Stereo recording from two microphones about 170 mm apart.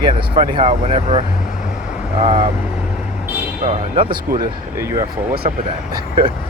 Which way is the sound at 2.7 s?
10° right (ahead or behind).